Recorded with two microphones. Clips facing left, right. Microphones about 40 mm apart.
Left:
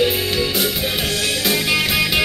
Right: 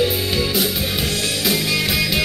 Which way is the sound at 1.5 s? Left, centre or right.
Left.